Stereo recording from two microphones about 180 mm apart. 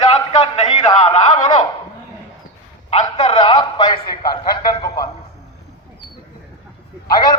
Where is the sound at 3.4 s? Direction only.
25° left (ahead or behind).